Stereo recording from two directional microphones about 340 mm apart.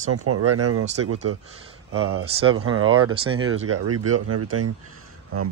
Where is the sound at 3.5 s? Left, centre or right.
Right.